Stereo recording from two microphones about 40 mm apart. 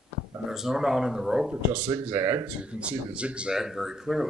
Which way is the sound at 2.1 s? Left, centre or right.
Right.